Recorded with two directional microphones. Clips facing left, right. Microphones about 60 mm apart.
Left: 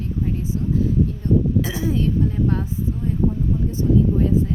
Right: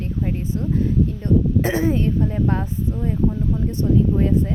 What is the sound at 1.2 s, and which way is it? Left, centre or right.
Speech, right.